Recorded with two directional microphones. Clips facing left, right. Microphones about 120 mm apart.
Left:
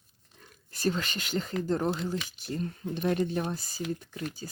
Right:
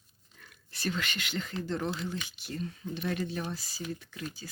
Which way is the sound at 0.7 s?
40° left (ahead or behind).